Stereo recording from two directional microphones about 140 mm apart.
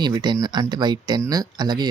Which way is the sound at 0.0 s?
30° right (ahead or behind).